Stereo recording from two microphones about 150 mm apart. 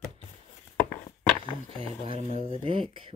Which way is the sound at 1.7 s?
35° right (ahead or behind).